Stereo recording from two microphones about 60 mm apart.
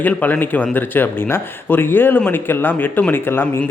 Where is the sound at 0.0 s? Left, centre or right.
Left.